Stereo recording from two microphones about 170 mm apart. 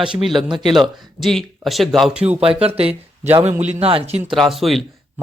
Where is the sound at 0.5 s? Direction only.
25° right (ahead or behind).